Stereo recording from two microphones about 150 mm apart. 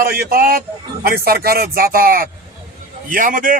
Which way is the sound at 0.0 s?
85° right.